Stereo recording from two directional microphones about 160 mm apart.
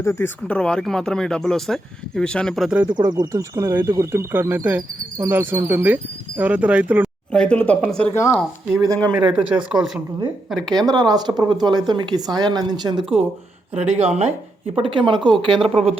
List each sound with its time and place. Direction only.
0.0 s speech: 20° left (ahead or behind)
0.4 s speech: 5° left (ahead or behind)
2.8 s speech: 25° right (ahead or behind); by 7.1 s 10° right (ahead or behind)
7.3 s speech: 5° left (ahead or behind)
8.1 s speech: 15° left (ahead or behind)
8.8 s speech: 20° right (ahead or behind)
9.3 s speech: 5° right (ahead or behind)
10.7 s speech: 25° right (ahead or behind); by 14.3 s 40° right (ahead or behind)
14.8 s speech: 30° right (ahead or behind)
15.6 s speech: 40° right (ahead or behind)